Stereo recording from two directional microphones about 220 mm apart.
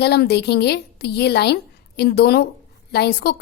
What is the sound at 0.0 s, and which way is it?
A woman's voice, 50° left (ahead or behind).